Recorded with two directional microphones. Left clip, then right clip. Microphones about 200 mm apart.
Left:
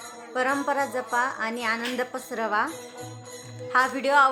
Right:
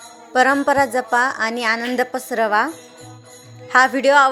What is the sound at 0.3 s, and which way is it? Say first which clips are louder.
A woman's voice: right 10 dB; 40° right (ahead or behind).